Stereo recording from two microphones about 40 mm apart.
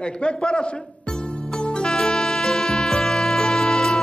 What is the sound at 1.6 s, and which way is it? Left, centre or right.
Music, left.